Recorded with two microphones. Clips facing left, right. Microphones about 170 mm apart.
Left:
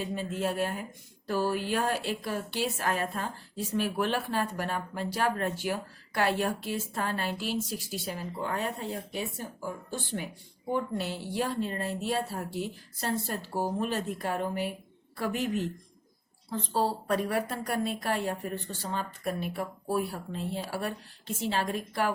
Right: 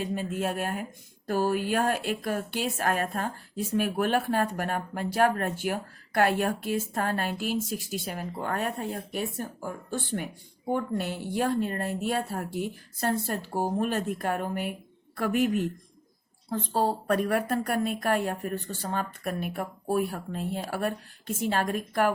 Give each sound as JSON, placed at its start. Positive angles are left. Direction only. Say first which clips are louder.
{"t": 0.0, "sound": "speech", "louder": "right 2 dB", "side_deg": -50}